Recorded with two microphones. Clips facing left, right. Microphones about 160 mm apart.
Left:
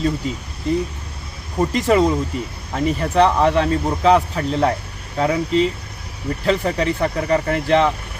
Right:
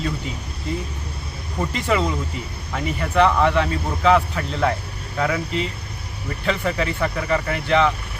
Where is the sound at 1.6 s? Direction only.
40° left (ahead or behind).